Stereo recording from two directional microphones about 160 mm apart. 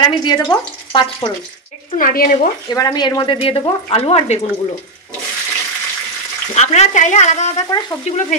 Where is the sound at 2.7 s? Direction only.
25° left (ahead or behind).